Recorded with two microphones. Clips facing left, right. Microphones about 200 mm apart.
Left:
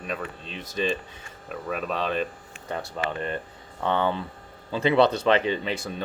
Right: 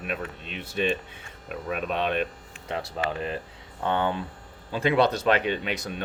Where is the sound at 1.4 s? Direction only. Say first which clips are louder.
Even; 5° right (ahead or behind).